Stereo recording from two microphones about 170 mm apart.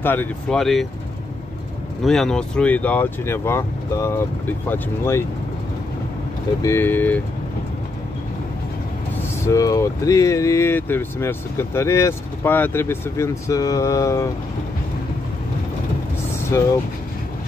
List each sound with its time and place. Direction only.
0.0 s speech: 10° left (ahead or behind)
2.0 s speech: centre (ahead or behind)
6.6 s speech: 15° left (ahead or behind)
9.4 s speech: 20° left (ahead or behind)
16.5 s speech: 15° left (ahead or behind)